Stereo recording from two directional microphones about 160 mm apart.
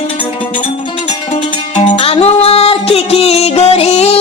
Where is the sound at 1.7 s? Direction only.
35° left (ahead or behind).